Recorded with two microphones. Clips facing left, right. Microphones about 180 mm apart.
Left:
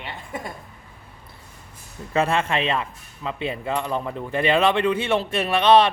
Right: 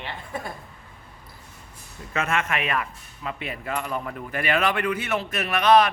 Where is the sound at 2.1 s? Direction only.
30° left (ahead or behind).